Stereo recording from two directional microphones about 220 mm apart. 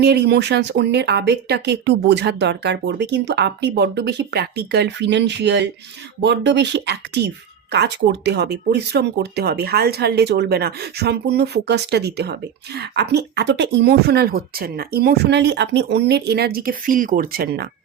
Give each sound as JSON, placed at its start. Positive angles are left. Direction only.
{"t": 0.0, "sound": "speech", "side_deg": -50}